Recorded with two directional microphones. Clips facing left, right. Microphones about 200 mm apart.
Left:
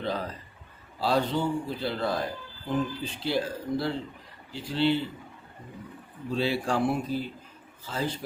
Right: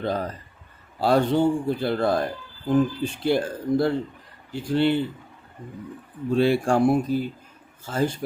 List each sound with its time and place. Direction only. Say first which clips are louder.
0.0 s a man's voice: right 5 dB; 45° right (ahead or behind)
6.3 s a man's voice: right 7 dB; 55° right (ahead or behind)